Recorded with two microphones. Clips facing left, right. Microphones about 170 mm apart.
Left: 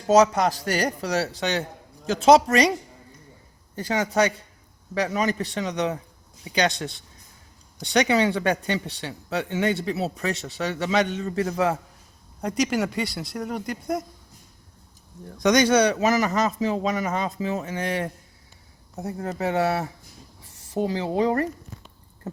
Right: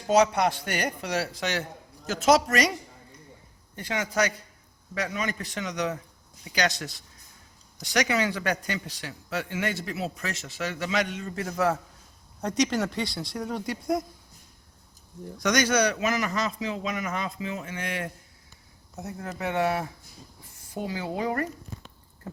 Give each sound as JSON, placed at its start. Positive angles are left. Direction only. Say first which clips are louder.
{"t": 0.1, "sound": "a man's voice", "louder": "left 4 dB", "side_deg": 40}
{"t": 3.8, "sound": "a man's voice", "louder": "left 5 dB", "side_deg": 35}
{"t": 12.4, "sound": "speech", "louder": "left 2 dB", "side_deg": 5}
{"t": 15.4, "sound": "a man's voice", "louder": "left 5 dB", "side_deg": 20}
{"t": 16.0, "sound": "speech", "louder": "left 6 dB", "side_deg": 40}